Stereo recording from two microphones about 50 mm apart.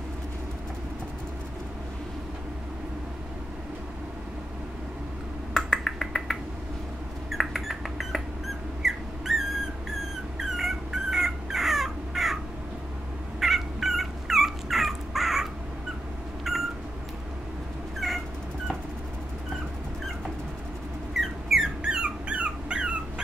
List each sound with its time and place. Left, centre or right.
5.5 s finger snapping: centre
7.2 s a sound: centre
8.8 s dog: centre
10.4 s dog: centre
13.4 s dog: centre
16.5 s a sound: centre
18.0 s dog: centre
21.1 s squeak: centre
21.8 s dog: right